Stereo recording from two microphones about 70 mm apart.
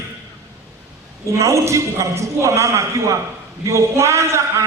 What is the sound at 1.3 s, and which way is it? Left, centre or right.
A man's voice, right.